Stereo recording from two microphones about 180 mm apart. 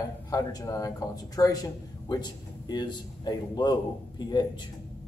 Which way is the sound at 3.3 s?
25° left (ahead or behind).